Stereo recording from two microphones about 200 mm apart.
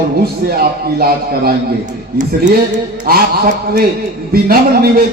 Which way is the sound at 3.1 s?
50° right (ahead or behind).